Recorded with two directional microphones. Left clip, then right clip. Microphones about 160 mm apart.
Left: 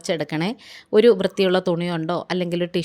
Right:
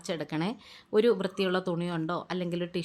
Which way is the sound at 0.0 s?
35° left (ahead or behind).